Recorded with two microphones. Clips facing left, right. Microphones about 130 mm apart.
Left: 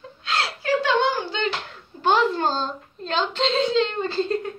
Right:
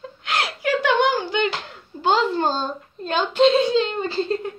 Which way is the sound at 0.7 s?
80° right.